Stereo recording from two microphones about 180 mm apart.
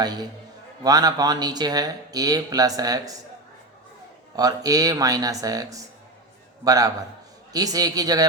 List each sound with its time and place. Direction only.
0.0 s speech: 20° right (ahead or behind)
4.4 s speech: 20° right (ahead or behind)